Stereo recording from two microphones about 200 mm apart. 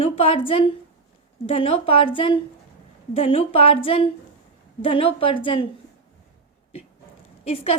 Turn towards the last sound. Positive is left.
turn(degrees=30)  # may be behind; listen again after turning